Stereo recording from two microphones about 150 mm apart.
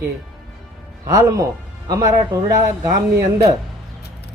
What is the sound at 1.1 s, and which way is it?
Speech, 20° right (ahead or behind).